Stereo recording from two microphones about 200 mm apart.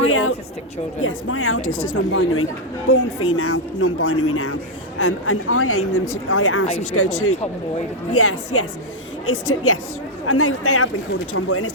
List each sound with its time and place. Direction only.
0.1 s a sound: 90° left
1.0 s speech: 90° left
1.6 s a woman's voice: 40° left (ahead or behind)
2.1 s speech: 90° left